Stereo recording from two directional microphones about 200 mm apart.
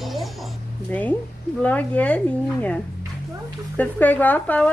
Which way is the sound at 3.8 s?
10° left (ahead or behind).